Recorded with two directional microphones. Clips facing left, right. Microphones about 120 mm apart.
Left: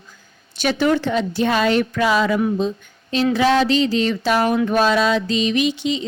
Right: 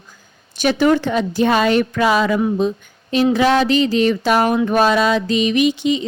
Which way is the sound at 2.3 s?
30° right (ahead or behind).